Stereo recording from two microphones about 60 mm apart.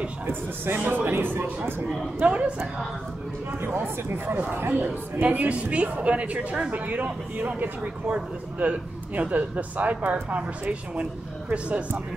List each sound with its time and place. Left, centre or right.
0.7 s a man's voice: right
2.2 s speech: centre
3.6 s a man's voice: right